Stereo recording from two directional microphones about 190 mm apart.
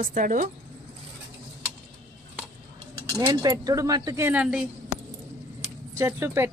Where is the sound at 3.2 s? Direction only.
25° right (ahead or behind); by 4.6 s 5° right (ahead or behind).